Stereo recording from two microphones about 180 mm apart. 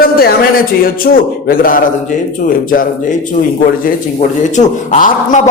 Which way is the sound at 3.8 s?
40° left (ahead or behind).